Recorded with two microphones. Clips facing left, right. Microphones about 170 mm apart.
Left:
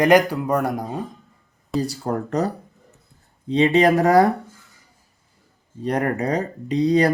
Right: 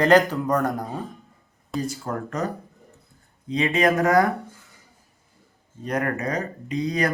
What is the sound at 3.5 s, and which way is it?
Speech, 30° left (ahead or behind).